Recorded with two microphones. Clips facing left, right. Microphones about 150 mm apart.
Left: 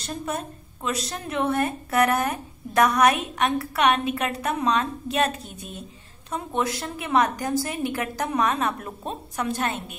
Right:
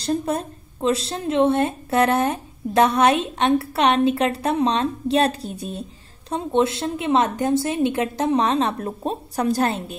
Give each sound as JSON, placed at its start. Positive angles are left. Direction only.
{"t": 0.0, "sound": "a woman's voice", "side_deg": -35}